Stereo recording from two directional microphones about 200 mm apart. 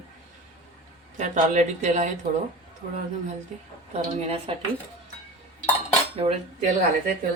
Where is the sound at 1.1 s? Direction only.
40° right (ahead or behind).